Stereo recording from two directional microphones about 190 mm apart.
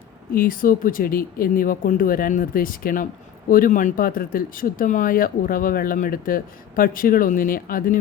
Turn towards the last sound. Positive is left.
turn(degrees=50)  # may be behind; listen again after turning